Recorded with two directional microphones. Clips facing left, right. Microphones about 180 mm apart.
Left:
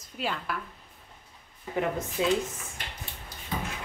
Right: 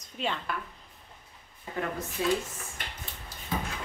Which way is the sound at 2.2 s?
20° left (ahead or behind).